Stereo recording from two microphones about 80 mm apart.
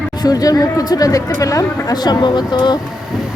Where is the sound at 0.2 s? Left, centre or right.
Left.